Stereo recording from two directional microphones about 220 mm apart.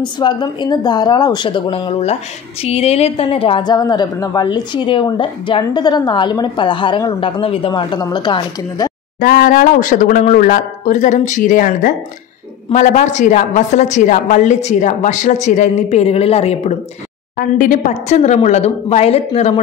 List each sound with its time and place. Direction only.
0.0 s speech: 20° left (ahead or behind)
9.2 s a woman's voice: 40° left (ahead or behind)
17.4 s a woman's voice: 40° left (ahead or behind)